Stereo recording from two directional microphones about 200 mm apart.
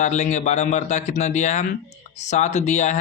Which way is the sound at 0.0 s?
35° left (ahead or behind).